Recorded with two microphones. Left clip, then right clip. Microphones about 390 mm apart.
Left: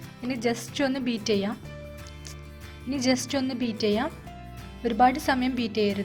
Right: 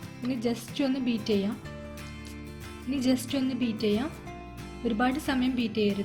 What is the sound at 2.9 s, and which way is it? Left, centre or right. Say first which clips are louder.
Speech: left 3 dB; centre.